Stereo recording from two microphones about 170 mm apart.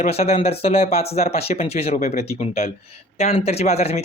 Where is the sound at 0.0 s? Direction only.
40° left (ahead or behind).